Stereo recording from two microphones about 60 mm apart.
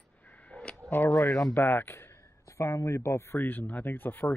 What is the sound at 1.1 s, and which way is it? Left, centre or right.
Speech, left.